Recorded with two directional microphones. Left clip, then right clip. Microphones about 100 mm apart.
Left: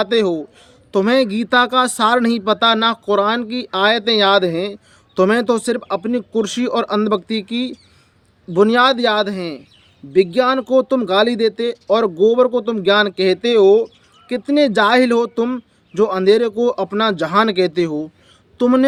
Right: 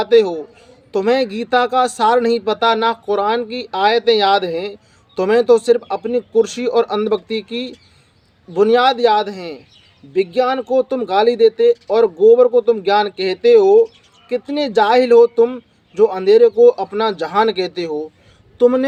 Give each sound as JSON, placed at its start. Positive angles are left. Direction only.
{"t": 0.0, "sound": "a woman's voice", "side_deg": 35}